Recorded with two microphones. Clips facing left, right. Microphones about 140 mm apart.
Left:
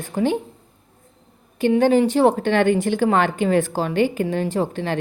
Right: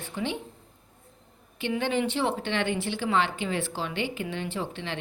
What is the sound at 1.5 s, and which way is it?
Speech, 40° left (ahead or behind).